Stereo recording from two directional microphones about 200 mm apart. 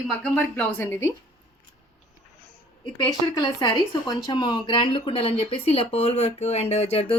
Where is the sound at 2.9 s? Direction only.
20° left (ahead or behind).